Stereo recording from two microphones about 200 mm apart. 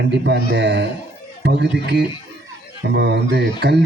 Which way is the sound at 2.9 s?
60° right (ahead or behind).